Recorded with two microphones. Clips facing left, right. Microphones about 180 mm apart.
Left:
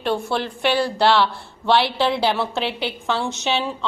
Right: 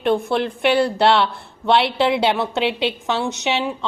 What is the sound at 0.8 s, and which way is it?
A woman's voice, 20° right (ahead or behind).